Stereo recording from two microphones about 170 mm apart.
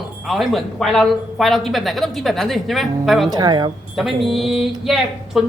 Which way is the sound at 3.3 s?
25° right (ahead or behind).